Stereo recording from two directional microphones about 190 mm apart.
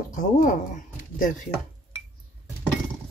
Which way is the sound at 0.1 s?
45° left (ahead or behind).